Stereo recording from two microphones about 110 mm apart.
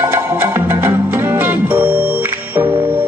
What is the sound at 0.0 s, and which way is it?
Music, 20° right (ahead or behind).